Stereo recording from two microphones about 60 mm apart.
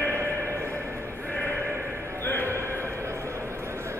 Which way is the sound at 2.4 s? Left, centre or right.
Right.